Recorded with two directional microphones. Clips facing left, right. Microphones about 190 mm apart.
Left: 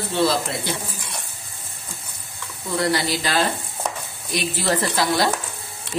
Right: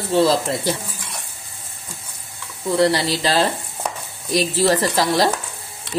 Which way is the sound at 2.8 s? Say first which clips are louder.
Right 4 dB; 30° right (ahead or behind).